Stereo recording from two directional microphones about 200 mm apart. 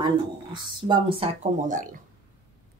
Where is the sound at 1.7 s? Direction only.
40° right (ahead or behind).